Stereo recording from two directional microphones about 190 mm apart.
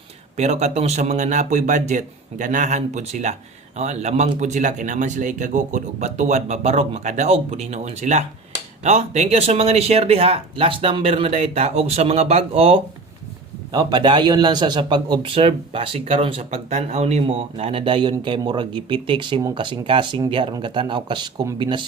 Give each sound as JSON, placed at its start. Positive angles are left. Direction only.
{"t": 0.3, "sound": "a man's voice", "side_deg": -35}